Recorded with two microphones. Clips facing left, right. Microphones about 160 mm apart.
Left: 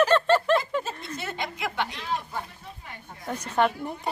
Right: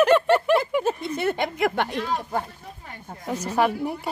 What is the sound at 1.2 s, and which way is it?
Speech, 55° right (ahead or behind).